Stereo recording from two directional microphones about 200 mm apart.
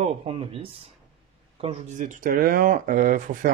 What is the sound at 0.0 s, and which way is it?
Speech, 30° right (ahead or behind).